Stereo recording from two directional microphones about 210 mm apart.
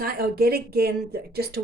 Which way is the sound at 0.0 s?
45° right (ahead or behind).